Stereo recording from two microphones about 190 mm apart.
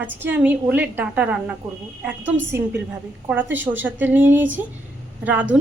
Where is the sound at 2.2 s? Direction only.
75° right (ahead or behind).